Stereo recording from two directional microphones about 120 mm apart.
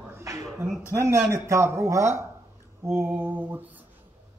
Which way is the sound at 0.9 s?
25° right (ahead or behind).